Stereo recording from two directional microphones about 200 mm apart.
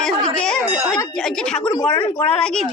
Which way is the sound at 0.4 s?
5° left (ahead or behind).